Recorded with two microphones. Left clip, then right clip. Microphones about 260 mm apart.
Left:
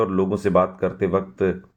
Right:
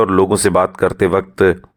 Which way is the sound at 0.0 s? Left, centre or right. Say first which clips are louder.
Right 9 dB; right.